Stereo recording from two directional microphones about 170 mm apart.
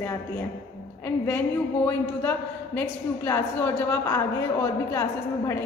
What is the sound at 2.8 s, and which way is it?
A woman's voice, 15° left (ahead or behind).